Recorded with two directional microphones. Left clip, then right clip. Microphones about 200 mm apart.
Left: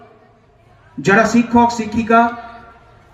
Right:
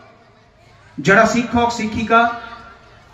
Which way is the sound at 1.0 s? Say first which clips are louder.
Even; 45° left (ahead or behind).